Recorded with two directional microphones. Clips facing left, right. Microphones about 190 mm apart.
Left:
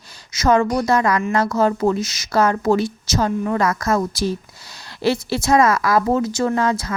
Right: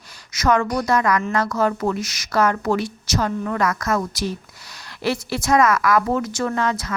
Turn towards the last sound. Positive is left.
turn(degrees=30)  # may be behind; listen again after turning